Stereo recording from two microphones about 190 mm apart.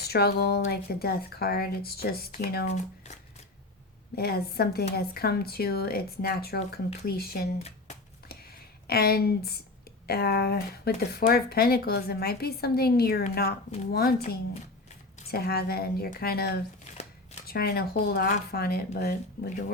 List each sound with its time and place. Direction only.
0.1 s speech: 55° left (ahead or behind)
2.6 s speech: 35° left (ahead or behind)
4.1 s speech: 55° left (ahead or behind)
8.9 s speech: 55° left (ahead or behind)